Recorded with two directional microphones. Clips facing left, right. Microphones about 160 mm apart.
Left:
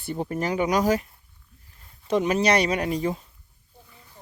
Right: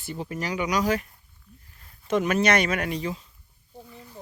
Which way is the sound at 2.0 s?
35° left (ahead or behind).